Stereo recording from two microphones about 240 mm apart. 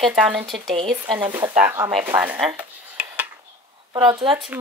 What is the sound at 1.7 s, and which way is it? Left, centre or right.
Speech, centre.